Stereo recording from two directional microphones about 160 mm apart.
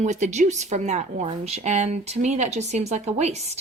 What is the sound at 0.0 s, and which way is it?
A woman's voice, 45° right (ahead or behind).